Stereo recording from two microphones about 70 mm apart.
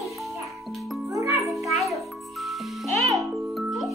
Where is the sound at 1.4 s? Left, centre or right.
Centre.